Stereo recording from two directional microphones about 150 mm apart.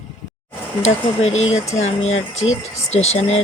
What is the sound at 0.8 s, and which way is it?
Speech, 45° left (ahead or behind).